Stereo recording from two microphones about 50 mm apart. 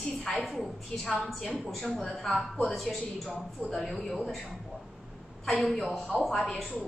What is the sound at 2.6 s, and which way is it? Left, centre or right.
A woman's voice, centre.